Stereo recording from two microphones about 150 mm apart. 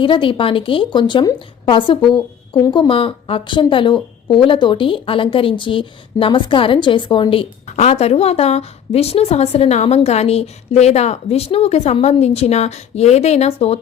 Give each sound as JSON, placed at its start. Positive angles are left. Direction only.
{"t": 0.0, "sound": "a woman's voice", "side_deg": 35}